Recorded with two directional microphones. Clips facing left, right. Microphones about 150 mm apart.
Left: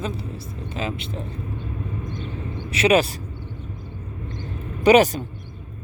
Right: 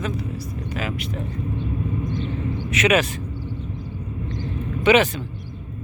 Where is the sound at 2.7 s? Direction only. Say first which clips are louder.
Left 2 dB; 30° left (ahead or behind).